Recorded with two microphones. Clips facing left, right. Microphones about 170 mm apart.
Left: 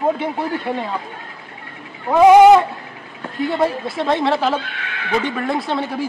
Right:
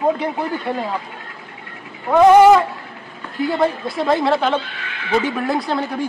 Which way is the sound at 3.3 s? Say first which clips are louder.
Even; centre (ahead or behind).